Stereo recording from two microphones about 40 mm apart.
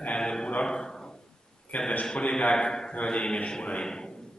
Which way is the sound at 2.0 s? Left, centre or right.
Left.